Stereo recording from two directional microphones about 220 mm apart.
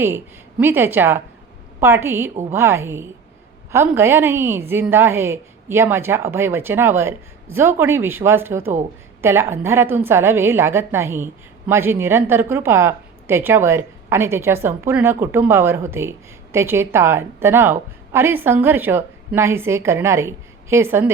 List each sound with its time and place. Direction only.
0.6 s a woman's voice: 10° right (ahead or behind)